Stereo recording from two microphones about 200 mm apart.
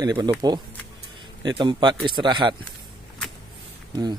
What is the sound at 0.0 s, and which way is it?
Speech, 20° right (ahead or behind).